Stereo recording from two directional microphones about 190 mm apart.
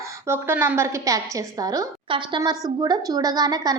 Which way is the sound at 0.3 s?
10° right (ahead or behind).